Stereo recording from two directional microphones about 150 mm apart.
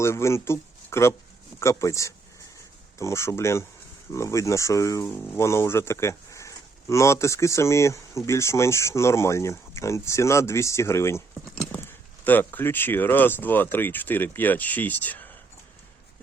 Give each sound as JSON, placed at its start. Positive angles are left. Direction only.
{"t": 0.0, "sound": "speech", "side_deg": 20}